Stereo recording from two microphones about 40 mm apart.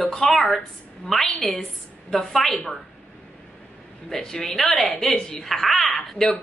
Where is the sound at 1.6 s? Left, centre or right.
Centre.